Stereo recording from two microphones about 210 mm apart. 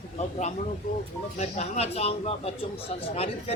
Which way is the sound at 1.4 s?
30° left (ahead or behind).